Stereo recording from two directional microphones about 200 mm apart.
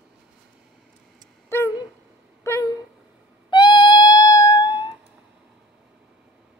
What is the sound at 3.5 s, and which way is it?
Music, 25° left (ahead or behind).